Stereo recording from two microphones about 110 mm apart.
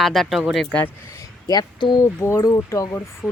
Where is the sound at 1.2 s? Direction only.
40° left (ahead or behind).